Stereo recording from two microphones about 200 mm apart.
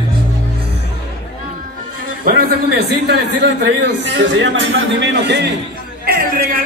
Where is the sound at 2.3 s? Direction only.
55° right (ahead or behind).